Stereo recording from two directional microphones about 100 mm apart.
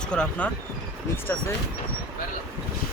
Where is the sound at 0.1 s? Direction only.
10° left (ahead or behind).